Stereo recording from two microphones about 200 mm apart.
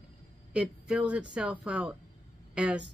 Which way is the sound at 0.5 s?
5° right (ahead or behind).